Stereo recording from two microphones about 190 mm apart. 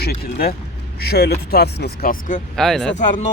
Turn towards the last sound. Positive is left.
turn(degrees=40)  # may be behind; listen again after turning